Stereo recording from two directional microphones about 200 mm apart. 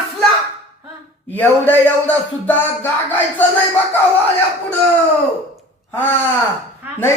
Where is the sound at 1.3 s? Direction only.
10° left (ahead or behind).